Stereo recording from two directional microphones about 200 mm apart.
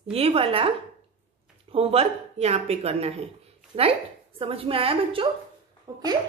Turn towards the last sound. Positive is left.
turn(degrees=-15)  # may be behind; listen again after turning